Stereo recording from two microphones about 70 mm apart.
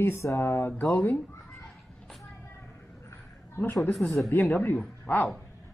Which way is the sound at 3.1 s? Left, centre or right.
Left.